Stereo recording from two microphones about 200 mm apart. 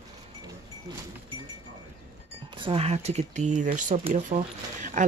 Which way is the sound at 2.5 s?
25° right (ahead or behind).